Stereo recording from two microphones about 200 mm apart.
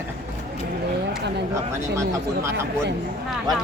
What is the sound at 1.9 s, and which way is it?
Speech, 15° right (ahead or behind).